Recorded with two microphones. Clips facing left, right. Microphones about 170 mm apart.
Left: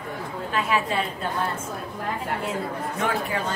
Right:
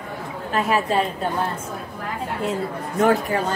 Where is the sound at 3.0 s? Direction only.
40° right (ahead or behind).